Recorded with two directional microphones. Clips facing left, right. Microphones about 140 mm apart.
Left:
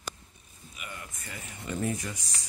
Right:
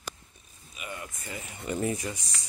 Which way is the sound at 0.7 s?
20° right (ahead or behind).